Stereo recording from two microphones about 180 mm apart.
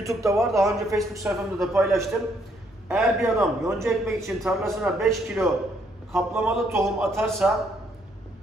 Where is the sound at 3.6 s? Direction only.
15° right (ahead or behind).